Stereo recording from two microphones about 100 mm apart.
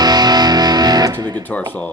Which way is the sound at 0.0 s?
45° right (ahead or behind).